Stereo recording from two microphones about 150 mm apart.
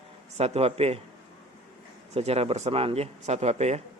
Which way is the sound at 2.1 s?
45° right (ahead or behind).